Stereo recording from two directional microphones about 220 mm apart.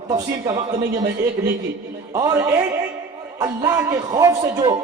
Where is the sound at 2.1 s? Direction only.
15° right (ahead or behind).